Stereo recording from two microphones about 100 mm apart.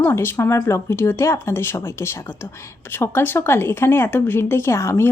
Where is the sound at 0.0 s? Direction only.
25° left (ahead or behind).